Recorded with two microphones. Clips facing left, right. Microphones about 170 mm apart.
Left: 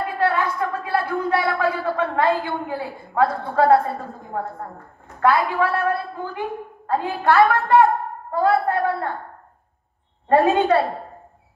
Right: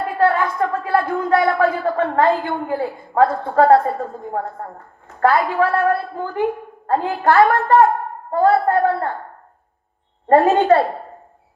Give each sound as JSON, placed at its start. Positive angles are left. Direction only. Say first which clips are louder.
{"t": 0.2, "sound": "a sound", "louder": "right 5 dB", "side_deg": -50}
{"t": 5.2, "sound": "a woman's voice", "louder": "right 3 dB", "side_deg": -45}
{"t": 10.2, "sound": "a woman's voice", "louder": "right 3 dB", "side_deg": -45}